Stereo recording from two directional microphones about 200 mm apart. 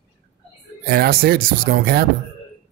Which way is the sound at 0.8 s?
50° right (ahead or behind).